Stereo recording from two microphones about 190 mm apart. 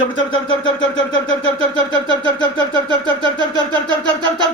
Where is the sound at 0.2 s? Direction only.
25° left (ahead or behind).